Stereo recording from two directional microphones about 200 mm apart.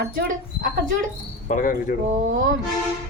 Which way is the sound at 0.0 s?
50° right (ahead or behind).